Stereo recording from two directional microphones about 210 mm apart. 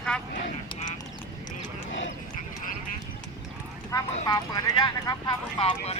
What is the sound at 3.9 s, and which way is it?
Speech, 15° left (ahead or behind).